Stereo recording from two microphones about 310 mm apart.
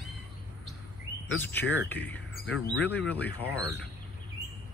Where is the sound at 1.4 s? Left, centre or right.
Centre.